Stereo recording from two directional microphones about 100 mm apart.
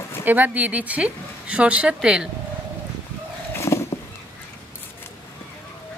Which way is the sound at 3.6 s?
25° left (ahead or behind).